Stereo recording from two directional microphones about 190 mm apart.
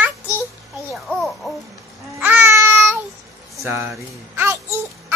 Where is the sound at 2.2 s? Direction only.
10° right (ahead or behind).